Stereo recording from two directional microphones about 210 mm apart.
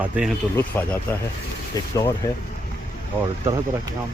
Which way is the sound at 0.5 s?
10° left (ahead or behind).